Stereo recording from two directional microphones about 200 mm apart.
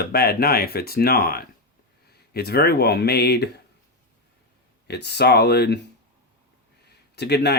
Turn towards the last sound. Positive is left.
turn(degrees=55)  # may be behind; listen again after turning